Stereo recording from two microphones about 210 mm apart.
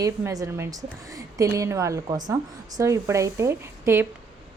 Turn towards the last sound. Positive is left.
turn(degrees=-10)  # may be behind; listen again after turning